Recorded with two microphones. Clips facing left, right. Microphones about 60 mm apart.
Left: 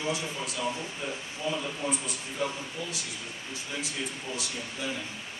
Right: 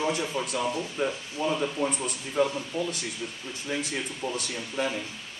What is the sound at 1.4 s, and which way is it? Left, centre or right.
Speech, right.